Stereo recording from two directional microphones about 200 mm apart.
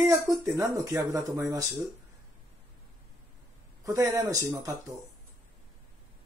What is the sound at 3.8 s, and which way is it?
Speech, 15° right (ahead or behind).